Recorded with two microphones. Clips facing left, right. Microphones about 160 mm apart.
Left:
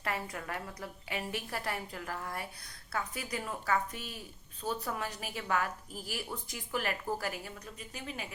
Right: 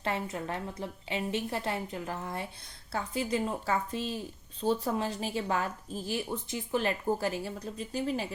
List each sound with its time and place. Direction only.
0.0 s a woman's voice: 25° right (ahead or behind)